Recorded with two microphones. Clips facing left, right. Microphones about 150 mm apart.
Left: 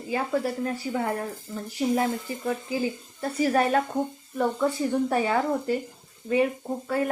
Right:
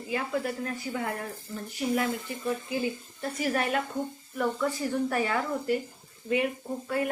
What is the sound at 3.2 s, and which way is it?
Speech, 35° left (ahead or behind).